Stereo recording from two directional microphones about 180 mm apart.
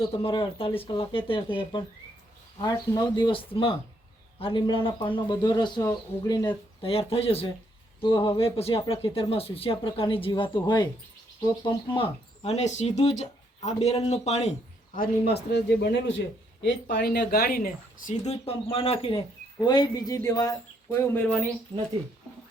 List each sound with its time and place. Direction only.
0.1 s speech: 30° left (ahead or behind)
14.9 s a man's voice: 60° left (ahead or behind); by 16.2 s 80° left
16.9 s speech: 65° left (ahead or behind); by 21.3 s 15° left (ahead or behind)
21.7 s speech: 20° right (ahead or behind)